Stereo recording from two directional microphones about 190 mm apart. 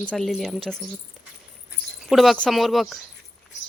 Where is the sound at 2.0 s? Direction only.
Centre (ahead or behind).